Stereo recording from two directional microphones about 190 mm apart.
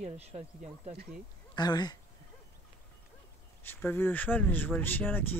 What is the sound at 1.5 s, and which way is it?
Speech, 20° left (ahead or behind).